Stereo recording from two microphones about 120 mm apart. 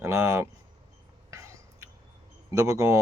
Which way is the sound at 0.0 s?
25° right (ahead or behind).